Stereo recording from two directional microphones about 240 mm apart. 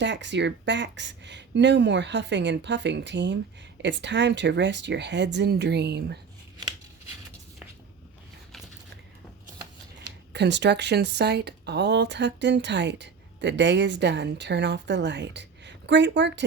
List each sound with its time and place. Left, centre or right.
0.0 s speech: right
10.3 s speech: right